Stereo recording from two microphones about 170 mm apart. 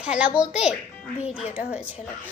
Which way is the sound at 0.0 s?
5° right (ahead or behind).